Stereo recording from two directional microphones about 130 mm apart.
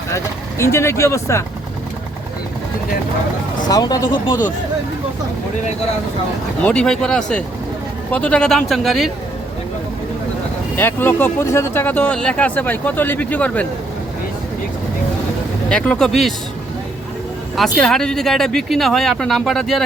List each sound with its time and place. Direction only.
0.6 s speech: 20° left (ahead or behind)
3.7 s speech: 30° left (ahead or behind)
6.7 s speech: 5° left (ahead or behind)
10.8 s speech: 15° left (ahead or behind)
15.7 s speech: 5° left (ahead or behind)
17.6 s speech: 5° left (ahead or behind)